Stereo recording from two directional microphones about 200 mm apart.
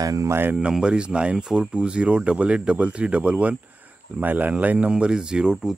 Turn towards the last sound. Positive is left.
turn(degrees=-5)  # may be behind; listen again after turning